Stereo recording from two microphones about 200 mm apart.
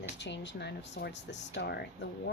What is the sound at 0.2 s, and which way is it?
Speech, 60° left (ahead or behind).